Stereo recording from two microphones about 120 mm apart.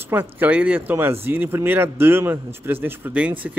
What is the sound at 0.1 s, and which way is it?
A man's voice, 15° right (ahead or behind).